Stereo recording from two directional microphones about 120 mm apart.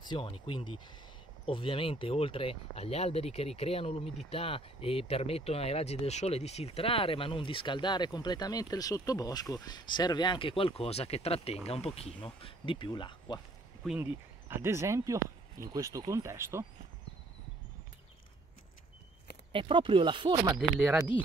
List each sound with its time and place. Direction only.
0.0 s speech: 45° left (ahead or behind); by 12.1 s 60° left (ahead or behind)
12.4 s speech: 45° left (ahead or behind)
13.8 s speech: 5° left (ahead or behind)
14.5 s speech: 20° right (ahead or behind)
19.5 s speech: 50° right (ahead or behind)